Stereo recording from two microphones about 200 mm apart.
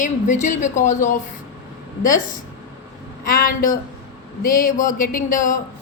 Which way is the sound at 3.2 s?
45° left (ahead or behind).